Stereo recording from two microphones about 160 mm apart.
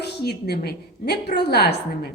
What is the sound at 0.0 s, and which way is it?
A woman's voice, 90° left.